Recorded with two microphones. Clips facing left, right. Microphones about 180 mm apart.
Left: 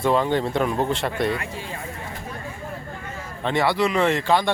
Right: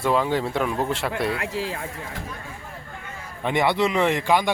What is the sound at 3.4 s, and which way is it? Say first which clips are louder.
Speech: even; 20° right (ahead or behind).